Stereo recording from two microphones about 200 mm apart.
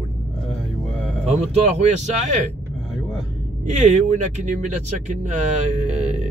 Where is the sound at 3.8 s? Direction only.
35° right (ahead or behind).